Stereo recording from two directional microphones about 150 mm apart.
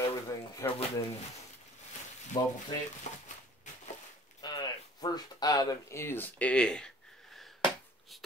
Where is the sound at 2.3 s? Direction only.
25° left (ahead or behind).